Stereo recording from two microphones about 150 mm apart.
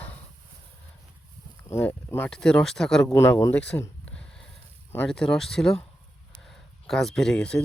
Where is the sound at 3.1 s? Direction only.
20° left (ahead or behind).